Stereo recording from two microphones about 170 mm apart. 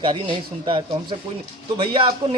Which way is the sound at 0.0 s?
30° right (ahead or behind).